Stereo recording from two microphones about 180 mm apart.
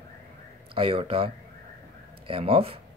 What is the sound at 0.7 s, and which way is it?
Speech, 30° right (ahead or behind).